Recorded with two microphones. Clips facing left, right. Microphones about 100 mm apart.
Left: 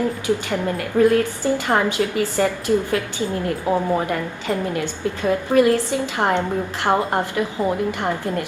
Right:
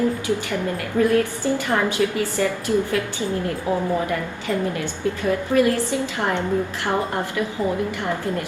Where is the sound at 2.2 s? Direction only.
20° left (ahead or behind).